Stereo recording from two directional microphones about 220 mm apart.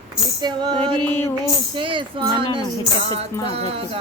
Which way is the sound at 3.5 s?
25° right (ahead or behind).